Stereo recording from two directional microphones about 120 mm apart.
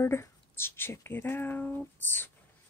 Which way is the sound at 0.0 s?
20° left (ahead or behind).